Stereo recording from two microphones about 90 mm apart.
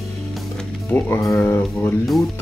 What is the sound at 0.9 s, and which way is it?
Speech, 20° left (ahead or behind).